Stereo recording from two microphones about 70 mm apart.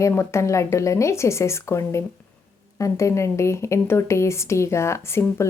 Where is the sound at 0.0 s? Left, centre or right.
Left.